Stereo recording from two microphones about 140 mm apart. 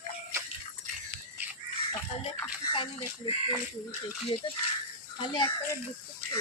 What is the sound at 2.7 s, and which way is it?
Chicken, 35° left (ahead or behind).